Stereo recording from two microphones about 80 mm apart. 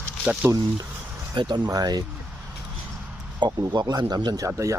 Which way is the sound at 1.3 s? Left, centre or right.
Right.